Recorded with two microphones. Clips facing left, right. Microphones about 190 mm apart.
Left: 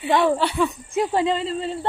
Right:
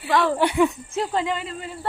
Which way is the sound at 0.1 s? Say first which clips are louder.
Left 2 dB; 15° left (ahead or behind).